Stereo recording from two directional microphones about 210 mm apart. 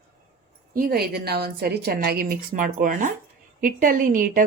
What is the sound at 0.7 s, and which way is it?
A woman's voice, 45° right (ahead or behind).